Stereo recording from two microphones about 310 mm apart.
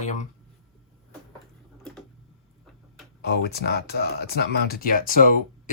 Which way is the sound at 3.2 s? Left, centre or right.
Left.